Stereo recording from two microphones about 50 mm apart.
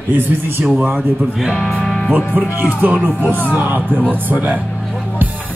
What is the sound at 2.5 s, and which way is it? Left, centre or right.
Speech, right.